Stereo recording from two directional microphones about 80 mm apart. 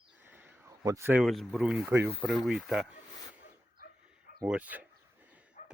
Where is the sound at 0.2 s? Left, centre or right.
Right.